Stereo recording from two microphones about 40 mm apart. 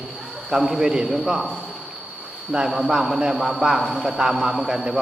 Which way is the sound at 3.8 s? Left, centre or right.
Centre.